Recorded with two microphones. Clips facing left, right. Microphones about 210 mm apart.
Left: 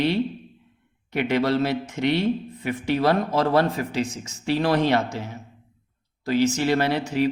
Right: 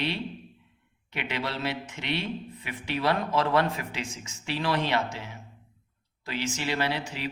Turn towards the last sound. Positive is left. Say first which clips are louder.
# left 8 dB
turn(degrees=45)  # may be behind; listen again after turning